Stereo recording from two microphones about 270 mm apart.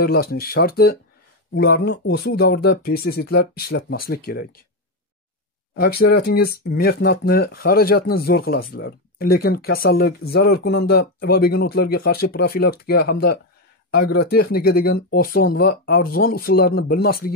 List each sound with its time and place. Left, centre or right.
0.0 s speech: left
5.8 s speech: left